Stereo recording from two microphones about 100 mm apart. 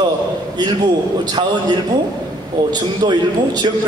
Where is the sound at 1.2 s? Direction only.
50° right (ahead or behind).